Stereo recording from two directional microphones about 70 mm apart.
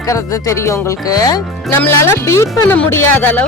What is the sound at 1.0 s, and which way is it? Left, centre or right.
Speech, left.